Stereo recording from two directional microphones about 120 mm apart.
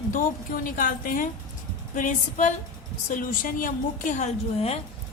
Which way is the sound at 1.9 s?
90° left.